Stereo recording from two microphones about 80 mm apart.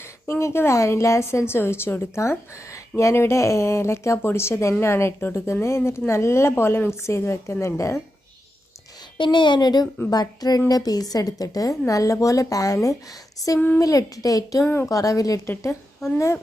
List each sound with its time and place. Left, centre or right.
0.0 s a woman's voice: left
9.1 s a woman's voice: left
16.1 s a woman's voice: left